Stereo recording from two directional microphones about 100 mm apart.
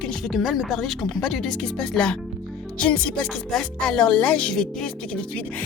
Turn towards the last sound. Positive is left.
turn(degrees=10)  # may be behind; listen again after turning